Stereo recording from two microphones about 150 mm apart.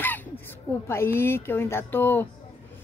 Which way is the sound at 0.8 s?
15° left (ahead or behind).